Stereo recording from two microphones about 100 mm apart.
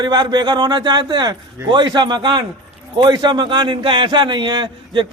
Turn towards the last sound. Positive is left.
turn(degrees=-50)  # may be behind; listen again after turning